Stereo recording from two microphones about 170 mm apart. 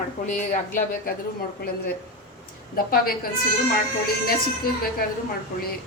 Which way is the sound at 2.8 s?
60° left (ahead or behind).